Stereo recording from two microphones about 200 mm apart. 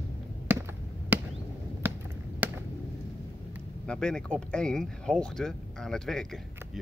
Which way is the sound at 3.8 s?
5° left (ahead or behind).